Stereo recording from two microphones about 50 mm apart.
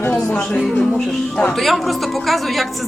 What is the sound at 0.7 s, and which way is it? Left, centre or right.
Music, centre.